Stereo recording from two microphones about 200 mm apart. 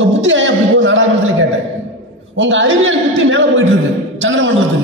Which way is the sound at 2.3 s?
70° right (ahead or behind).